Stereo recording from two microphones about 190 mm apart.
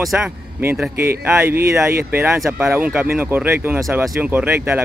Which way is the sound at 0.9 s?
50° right (ahead or behind).